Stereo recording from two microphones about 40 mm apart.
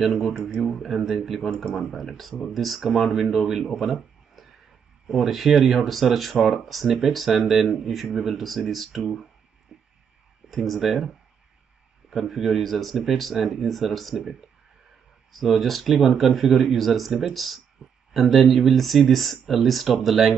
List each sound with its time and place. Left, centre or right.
0.0 s speech: centre
2.0 s speech: centre
9.7 s a sound: centre
10.5 s speech: centre
12.1 s speech: centre
15.3 s speech: centre
17.8 s a sound: centre
18.1 s speech: centre